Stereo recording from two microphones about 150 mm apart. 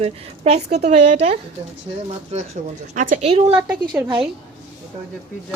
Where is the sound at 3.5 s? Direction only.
10° right (ahead or behind).